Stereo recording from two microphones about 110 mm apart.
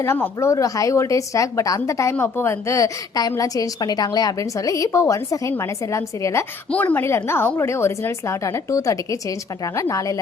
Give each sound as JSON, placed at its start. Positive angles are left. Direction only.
{"t": 0.0, "sound": "a woman's voice", "side_deg": 25}
{"t": 6.7, "sound": "a woman's voice", "side_deg": 15}